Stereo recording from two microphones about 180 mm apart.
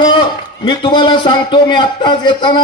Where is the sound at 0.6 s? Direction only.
25° left (ahead or behind).